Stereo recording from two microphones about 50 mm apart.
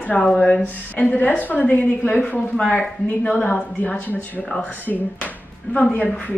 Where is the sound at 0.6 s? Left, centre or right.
Left.